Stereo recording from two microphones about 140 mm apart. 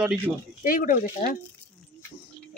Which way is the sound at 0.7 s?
80° left.